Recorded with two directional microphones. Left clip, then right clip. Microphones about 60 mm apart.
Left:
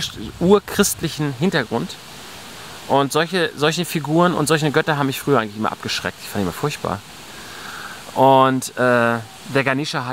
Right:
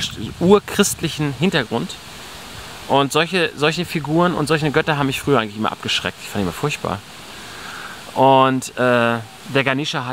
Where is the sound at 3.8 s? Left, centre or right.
Centre.